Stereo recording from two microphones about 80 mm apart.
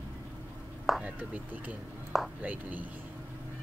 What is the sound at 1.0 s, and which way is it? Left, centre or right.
Speech, right.